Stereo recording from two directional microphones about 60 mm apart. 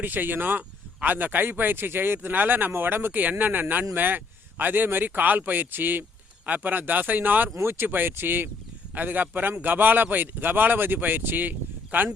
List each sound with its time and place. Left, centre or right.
0.0 s speech: right
7.5 s speech: right